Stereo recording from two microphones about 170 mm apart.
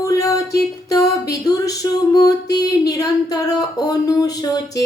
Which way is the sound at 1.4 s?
20° left (ahead or behind).